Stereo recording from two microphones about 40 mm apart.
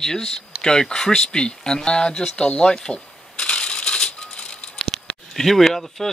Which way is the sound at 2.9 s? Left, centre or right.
Left.